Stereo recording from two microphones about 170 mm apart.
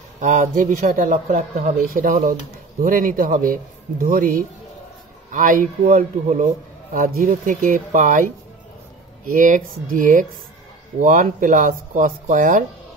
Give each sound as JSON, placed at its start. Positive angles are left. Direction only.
{"t": 0.2, "sound": "speech", "side_deg": -45}
{"t": 9.3, "sound": "speech", "side_deg": -55}